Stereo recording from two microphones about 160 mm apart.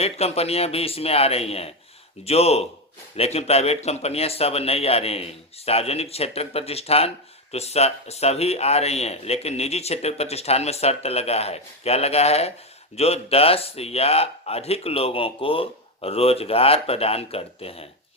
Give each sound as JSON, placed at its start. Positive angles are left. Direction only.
{"t": 0.0, "sound": "speech", "side_deg": 40}